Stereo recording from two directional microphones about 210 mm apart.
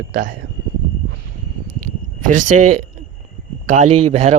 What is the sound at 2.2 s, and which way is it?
A man's voice, 35° right (ahead or behind).